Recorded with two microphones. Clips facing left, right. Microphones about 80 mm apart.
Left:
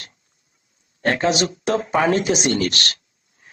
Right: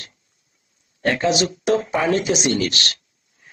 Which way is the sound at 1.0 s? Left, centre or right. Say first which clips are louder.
Even; left.